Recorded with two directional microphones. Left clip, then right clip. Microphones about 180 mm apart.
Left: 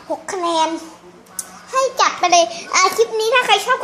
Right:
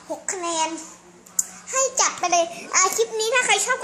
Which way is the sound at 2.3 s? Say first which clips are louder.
Left 7 dB; centre (ahead or behind).